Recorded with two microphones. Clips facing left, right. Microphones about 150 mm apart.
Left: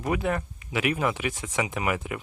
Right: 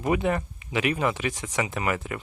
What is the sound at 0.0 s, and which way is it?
Speech, centre (ahead or behind).